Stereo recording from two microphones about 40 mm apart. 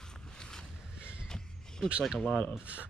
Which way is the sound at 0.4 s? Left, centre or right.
Centre.